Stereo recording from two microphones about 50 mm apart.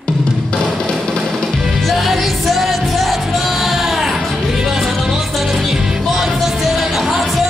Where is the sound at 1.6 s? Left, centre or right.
Centre.